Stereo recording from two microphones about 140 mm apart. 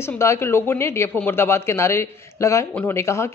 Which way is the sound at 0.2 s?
20° left (ahead or behind).